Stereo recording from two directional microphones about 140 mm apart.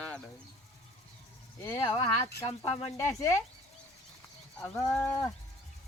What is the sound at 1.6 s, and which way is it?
Speech, 35° left (ahead or behind).